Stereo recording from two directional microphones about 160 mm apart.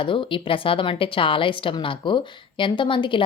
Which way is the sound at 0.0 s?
30° left (ahead or behind).